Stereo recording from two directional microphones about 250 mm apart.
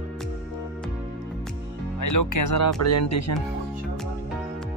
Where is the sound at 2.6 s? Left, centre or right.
Left.